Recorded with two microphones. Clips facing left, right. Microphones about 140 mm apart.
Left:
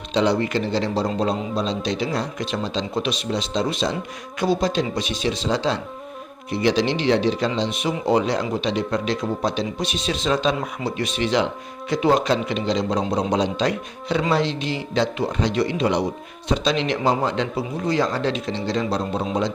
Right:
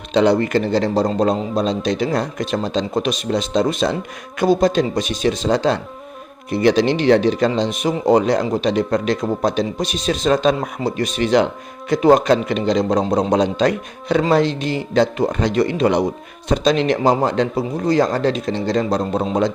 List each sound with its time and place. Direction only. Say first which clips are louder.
0.1 s speech: right 5 dB; 55° right (ahead or behind)